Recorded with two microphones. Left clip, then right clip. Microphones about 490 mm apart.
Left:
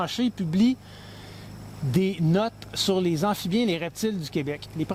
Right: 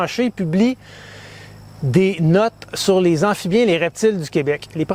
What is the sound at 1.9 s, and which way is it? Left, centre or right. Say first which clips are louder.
Speech: right 10 dB; right.